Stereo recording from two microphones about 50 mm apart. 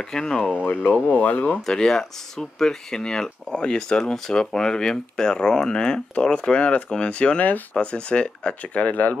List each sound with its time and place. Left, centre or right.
0.0 s speech: centre
1.0 s speech: left